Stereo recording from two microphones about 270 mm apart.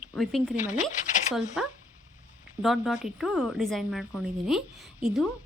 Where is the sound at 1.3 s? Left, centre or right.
Centre.